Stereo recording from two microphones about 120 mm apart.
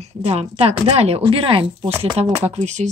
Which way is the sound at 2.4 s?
70° right (ahead or behind).